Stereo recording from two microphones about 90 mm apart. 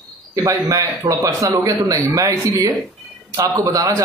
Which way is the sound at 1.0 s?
35° right (ahead or behind).